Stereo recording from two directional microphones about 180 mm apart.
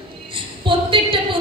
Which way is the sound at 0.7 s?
30° right (ahead or behind).